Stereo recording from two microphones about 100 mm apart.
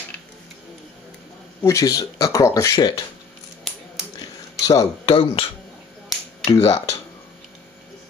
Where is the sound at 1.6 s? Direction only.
35° left (ahead or behind).